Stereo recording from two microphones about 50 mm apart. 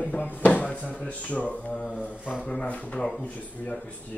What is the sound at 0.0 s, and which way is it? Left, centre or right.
Speech, left.